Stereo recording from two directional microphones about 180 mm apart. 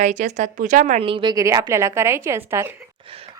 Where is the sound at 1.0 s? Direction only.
30° right (ahead or behind).